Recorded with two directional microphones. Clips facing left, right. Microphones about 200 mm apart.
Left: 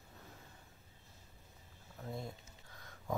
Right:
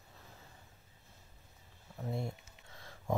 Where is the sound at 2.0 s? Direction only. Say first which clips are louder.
Right 5 dB; 25° right (ahead or behind).